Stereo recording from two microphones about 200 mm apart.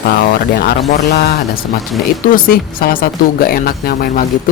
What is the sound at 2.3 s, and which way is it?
Speech, 45° left (ahead or behind).